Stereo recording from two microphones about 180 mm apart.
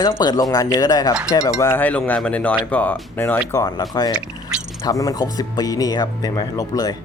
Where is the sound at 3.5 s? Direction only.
20° left (ahead or behind).